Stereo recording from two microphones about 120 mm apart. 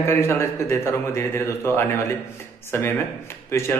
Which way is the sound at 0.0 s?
20° left (ahead or behind).